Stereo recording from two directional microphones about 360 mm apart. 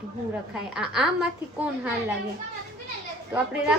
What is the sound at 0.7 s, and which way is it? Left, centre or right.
Speech, centre.